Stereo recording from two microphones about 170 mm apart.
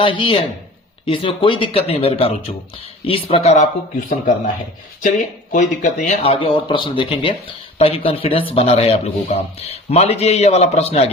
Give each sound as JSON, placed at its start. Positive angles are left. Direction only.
{"t": 0.0, "sound": "speech", "side_deg": 30}
{"t": 5.0, "sound": "speech", "side_deg": 45}